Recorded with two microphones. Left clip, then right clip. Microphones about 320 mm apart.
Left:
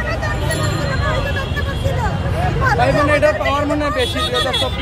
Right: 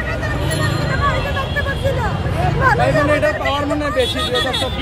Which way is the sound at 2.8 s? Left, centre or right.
Left.